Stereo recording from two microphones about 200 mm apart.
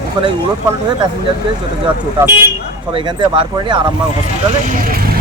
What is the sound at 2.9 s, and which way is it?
Speech, 25° right (ahead or behind).